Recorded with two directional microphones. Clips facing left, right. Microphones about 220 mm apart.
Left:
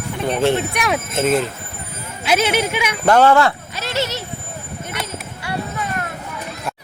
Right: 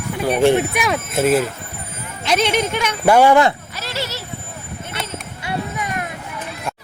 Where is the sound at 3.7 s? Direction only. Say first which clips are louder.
Left 4 dB; 20° left (ahead or behind).